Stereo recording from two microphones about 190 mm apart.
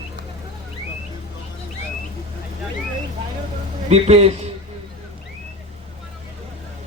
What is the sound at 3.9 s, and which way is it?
Speech, 35° right (ahead or behind).